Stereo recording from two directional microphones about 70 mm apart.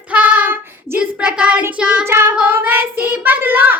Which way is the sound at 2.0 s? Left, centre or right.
Right.